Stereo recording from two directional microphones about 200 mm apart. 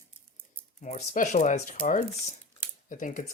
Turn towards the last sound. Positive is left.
turn(degrees=40)  # may be behind; listen again after turning